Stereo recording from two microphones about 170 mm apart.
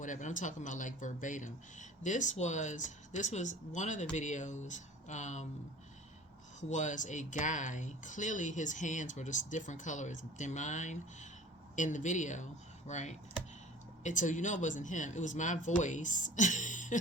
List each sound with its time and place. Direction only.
0.0 s speech: 45° left (ahead or behind)
6.6 s speech: 45° left (ahead or behind)